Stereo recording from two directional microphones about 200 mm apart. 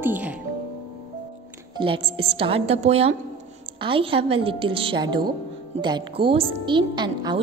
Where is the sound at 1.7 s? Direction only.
25° right (ahead or behind).